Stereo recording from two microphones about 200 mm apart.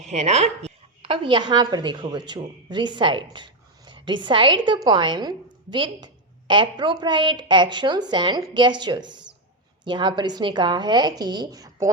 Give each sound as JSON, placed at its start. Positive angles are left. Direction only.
{"t": 0.1, "sound": "a woman's voice", "side_deg": -35}